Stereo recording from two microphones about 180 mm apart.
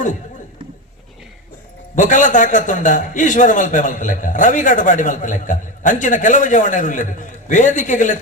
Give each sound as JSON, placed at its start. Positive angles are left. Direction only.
{"t": 2.0, "sound": "a man's voice", "side_deg": 45}